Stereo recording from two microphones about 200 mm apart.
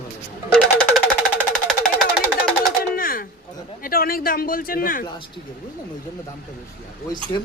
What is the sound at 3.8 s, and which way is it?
Speech, 45° left (ahead or behind).